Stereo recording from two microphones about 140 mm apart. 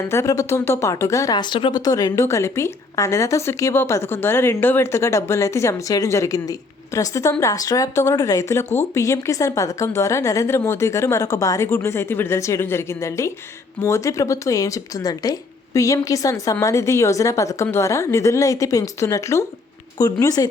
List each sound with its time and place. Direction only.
0.1 s speech: 20° left (ahead or behind)